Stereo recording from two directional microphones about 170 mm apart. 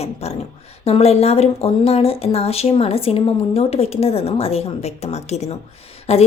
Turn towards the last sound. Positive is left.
turn(degrees=35)  # may be behind; listen again after turning